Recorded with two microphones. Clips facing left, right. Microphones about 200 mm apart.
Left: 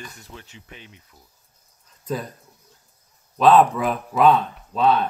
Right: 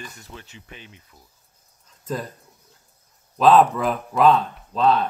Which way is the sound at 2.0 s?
Centre (ahead or behind).